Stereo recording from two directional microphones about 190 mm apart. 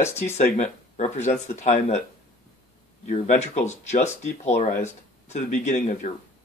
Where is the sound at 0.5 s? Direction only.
35° left (ahead or behind).